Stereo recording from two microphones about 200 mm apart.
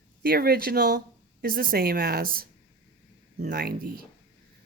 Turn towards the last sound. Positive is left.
turn(degrees=-45)  # may be behind; listen again after turning